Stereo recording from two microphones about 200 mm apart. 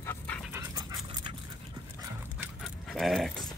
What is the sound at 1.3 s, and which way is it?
Dog, 25° right (ahead or behind).